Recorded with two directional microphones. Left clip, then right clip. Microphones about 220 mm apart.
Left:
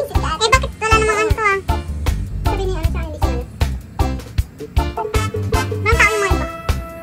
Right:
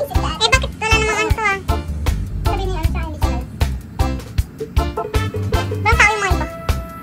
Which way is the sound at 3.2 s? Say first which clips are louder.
Left 2 dB; centre (ahead or behind).